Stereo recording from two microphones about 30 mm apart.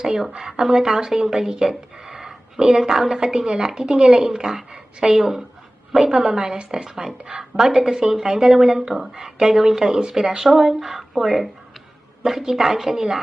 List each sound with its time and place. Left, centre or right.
0.0 s speech: centre
2.0 s a sound: centre
3.4 s a woman's voice: right
6.4 s a woman's voice: right
6.8 s speech: centre
10.4 s speech: centre
12.2 s speech: centre